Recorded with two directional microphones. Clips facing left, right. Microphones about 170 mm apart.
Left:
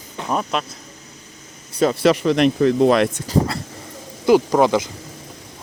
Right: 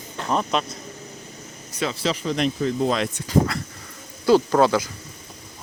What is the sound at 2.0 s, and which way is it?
Speech, 70° left (ahead or behind).